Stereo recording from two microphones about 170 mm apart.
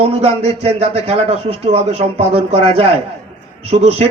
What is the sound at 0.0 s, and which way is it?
Speech, 35° right (ahead or behind).